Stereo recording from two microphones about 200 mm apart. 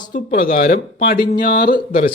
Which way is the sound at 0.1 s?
45° left (ahead or behind).